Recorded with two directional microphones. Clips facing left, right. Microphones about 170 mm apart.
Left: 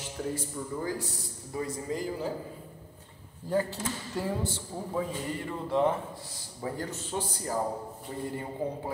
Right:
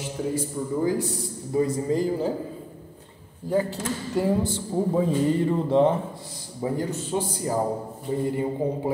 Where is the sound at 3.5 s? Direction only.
15° right (ahead or behind).